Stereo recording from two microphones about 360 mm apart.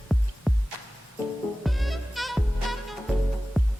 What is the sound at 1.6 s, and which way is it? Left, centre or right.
Music, centre.